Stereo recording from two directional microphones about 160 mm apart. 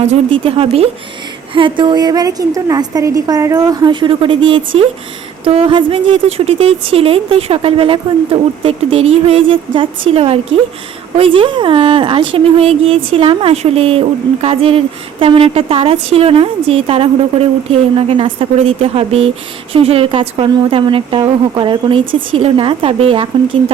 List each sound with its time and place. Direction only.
0.3 s a woman's voice: 35° right (ahead or behind)